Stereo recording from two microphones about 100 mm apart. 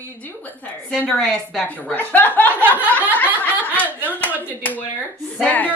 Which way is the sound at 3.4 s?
20° left (ahead or behind).